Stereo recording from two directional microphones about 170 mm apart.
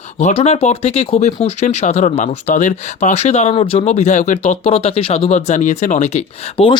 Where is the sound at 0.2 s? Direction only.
40° left (ahead or behind).